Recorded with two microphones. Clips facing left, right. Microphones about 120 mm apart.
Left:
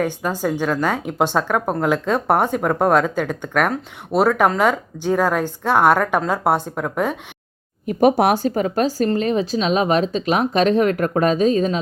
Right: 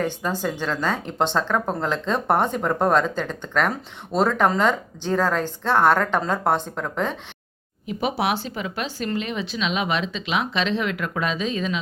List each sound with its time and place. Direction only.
0.0 s speech: 10° left (ahead or behind)
7.9 s speech: 50° left (ahead or behind)